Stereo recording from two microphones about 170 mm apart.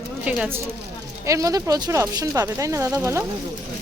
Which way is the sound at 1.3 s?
20° right (ahead or behind).